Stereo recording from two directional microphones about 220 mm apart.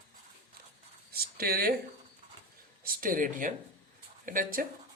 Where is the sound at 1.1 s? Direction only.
45° right (ahead or behind).